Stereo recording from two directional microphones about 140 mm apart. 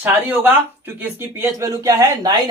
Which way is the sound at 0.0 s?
15° right (ahead or behind).